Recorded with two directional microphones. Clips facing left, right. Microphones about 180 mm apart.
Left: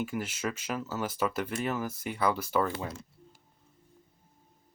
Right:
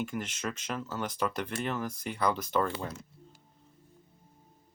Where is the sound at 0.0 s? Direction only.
5° left (ahead or behind).